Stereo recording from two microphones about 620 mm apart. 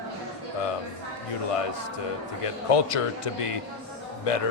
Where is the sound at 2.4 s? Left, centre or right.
Left.